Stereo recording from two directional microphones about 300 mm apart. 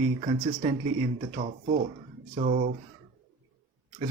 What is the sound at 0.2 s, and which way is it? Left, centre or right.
Speech, right.